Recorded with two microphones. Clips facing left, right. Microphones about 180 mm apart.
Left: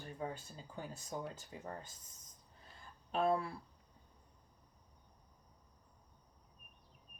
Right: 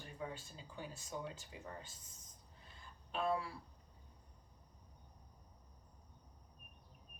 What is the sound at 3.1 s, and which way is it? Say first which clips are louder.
Speech: left 4 dB; 40° left (ahead or behind).